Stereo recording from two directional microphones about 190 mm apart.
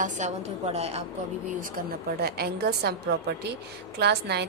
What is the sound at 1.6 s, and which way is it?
A woman's voice, 55° right (ahead or behind).